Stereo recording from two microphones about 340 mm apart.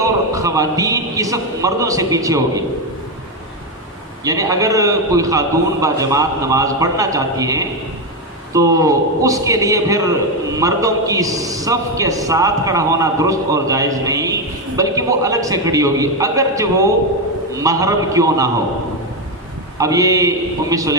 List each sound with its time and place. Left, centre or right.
0.0 s a man's voice: centre
4.2 s a man's voice: centre
19.8 s a man's voice: centre